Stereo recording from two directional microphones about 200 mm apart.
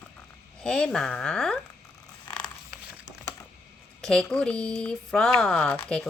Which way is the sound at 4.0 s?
5° left (ahead or behind).